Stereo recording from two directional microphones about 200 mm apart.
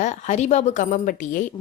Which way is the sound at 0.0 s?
35° left (ahead or behind).